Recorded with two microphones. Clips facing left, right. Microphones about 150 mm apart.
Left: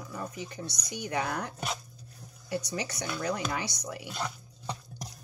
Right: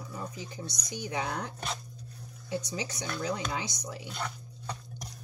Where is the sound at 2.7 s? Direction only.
60° left (ahead or behind).